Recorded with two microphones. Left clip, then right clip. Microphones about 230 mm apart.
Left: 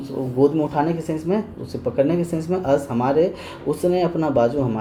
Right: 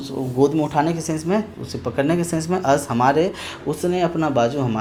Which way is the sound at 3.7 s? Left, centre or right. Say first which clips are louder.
Left 2 dB; right.